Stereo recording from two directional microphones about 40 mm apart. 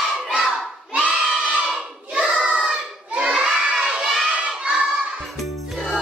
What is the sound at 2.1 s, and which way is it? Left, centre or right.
Child singing, right.